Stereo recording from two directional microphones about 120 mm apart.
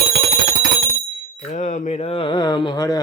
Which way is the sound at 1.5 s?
85° left.